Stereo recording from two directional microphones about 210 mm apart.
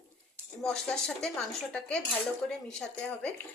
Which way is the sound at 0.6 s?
Centre (ahead or behind).